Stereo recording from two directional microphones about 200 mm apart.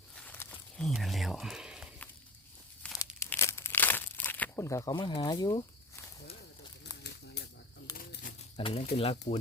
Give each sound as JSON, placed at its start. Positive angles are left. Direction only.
{"t": 0.2, "sound": "a sound", "side_deg": 10}
{"t": 2.8, "sound": "tearing", "side_deg": 5}
{"t": 3.2, "sound": "crumpling", "side_deg": 15}
{"t": 7.4, "sound": "a sound", "side_deg": 60}
{"t": 7.9, "sound": "pigeon", "side_deg": 45}
{"t": 8.5, "sound": "speech", "side_deg": 25}